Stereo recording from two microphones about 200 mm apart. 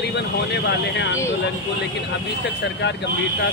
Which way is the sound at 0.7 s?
65° left (ahead or behind).